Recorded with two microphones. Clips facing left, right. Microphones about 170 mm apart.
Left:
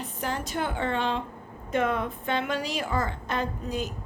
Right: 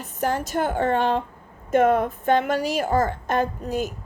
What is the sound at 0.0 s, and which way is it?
A woman's voice, 45° right (ahead or behind).